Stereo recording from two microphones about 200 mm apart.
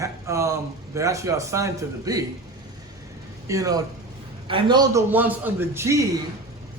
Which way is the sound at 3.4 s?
15° right (ahead or behind).